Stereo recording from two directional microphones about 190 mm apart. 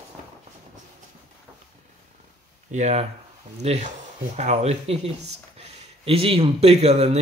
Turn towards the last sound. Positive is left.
turn(degrees=-35)  # may be behind; listen again after turning